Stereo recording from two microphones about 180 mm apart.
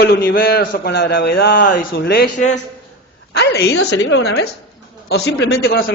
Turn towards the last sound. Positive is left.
turn(degrees=55)  # may be behind; listen again after turning